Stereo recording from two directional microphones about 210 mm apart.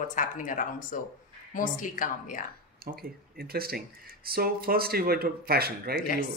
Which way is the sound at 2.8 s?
45° right (ahead or behind).